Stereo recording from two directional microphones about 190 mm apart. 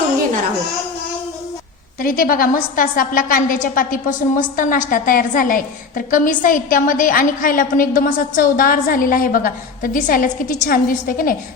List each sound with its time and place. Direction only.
2.0 s a woman's voice: 50° left (ahead or behind)